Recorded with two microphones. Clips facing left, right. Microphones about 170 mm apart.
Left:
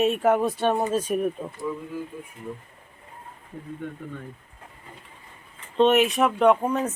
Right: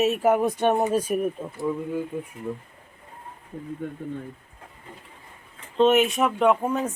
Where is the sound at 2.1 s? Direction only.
60° right (ahead or behind).